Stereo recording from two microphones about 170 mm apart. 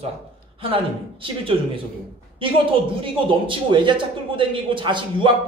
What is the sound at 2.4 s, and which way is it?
A man's voice, 30° right (ahead or behind).